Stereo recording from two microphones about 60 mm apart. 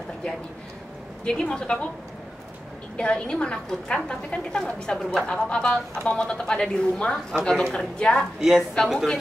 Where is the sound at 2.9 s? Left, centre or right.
Centre.